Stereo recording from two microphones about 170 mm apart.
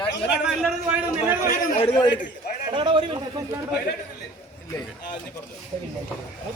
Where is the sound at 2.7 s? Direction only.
30° right (ahead or behind).